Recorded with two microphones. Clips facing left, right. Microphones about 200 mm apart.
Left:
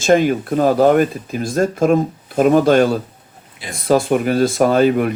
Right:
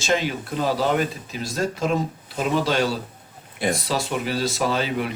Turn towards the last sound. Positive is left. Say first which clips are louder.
# left 10 dB
turn(degrees=50)  # may be behind; listen again after turning